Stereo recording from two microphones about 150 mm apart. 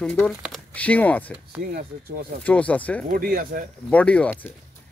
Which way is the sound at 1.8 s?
70° right (ahead or behind).